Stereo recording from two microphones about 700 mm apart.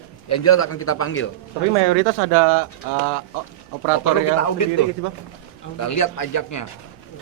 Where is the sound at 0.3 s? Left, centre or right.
Centre.